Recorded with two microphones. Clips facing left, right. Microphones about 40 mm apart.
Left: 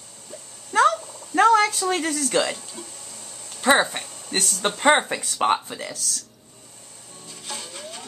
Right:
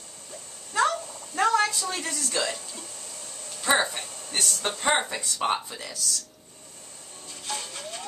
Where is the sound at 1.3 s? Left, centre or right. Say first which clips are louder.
Left 6 dB; left.